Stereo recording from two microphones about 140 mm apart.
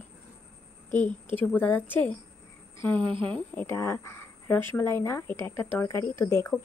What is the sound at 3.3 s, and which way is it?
A woman's voice, 10° left (ahead or behind).